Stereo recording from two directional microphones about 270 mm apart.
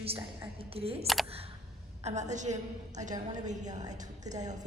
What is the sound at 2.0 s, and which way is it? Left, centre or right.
A woman's voice, right.